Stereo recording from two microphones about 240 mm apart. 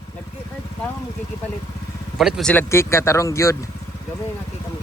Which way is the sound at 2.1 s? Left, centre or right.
Centre.